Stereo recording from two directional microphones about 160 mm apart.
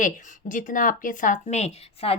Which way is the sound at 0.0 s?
55° left (ahead or behind).